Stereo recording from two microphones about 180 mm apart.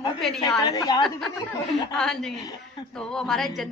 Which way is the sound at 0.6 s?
20° left (ahead or behind).